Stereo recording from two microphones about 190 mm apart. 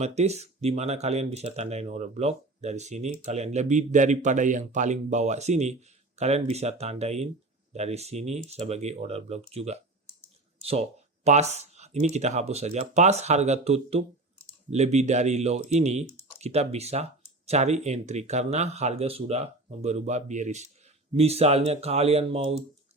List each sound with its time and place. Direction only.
0.0 s speech: 35° right (ahead or behind)